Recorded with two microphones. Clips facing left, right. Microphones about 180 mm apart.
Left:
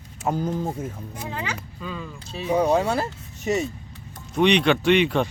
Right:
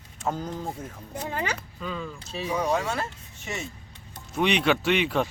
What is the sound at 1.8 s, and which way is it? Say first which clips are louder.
Speech: even; 5° left (ahead or behind).